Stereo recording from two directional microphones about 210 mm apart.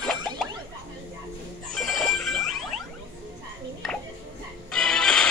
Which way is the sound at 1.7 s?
Centre (ahead or behind).